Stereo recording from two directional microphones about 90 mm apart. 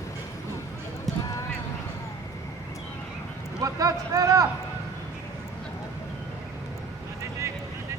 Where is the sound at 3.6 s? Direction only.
40° right (ahead or behind).